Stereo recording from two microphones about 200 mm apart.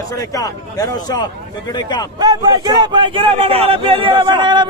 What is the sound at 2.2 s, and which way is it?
Speech, 20° right (ahead or behind).